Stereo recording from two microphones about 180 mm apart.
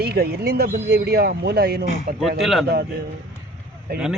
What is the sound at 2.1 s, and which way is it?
Speech, centre (ahead or behind).